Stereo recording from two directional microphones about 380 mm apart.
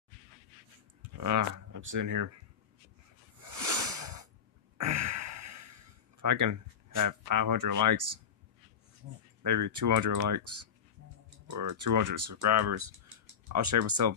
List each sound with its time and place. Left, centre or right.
1.2 s speech: right
3.3 s a sound: right
4.7 s gasp: right
9.4 s speech: right